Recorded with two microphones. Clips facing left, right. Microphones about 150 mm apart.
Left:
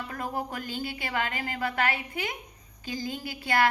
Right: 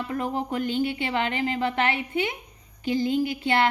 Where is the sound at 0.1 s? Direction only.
20° right (ahead or behind).